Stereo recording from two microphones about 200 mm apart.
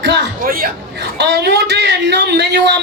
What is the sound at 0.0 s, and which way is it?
Speech, 55° right (ahead or behind).